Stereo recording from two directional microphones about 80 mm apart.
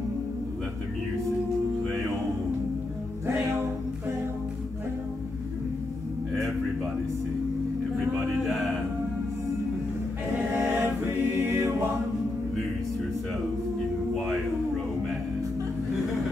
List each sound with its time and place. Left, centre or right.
10.5 s a capella: centre
11.3 s music: right